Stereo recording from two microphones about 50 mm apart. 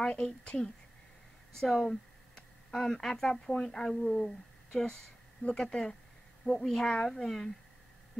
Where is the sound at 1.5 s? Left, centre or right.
Centre.